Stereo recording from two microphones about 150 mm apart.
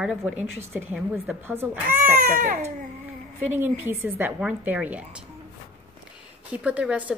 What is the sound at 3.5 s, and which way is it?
A woman's voice, 15° right (ahead or behind).